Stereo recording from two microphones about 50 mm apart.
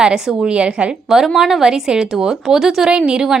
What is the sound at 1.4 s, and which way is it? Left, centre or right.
A woman's voice, centre.